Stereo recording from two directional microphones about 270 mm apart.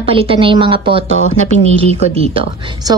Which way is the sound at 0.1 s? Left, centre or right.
Centre.